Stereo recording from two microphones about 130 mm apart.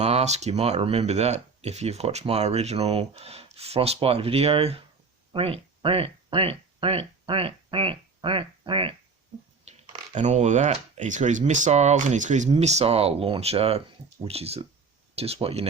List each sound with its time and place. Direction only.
0.0 s speech: 55° right (ahead or behind)
9.7 s a sound: 60° right (ahead or behind)
10.2 s speech: 65° right (ahead or behind)
12.5 s speech: 55° right (ahead or behind)